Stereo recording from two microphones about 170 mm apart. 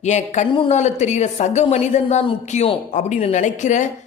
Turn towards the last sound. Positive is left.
turn(degrees=45)  # may be behind; listen again after turning